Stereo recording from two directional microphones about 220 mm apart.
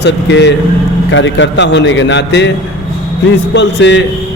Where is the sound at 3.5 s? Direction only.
55° left (ahead or behind).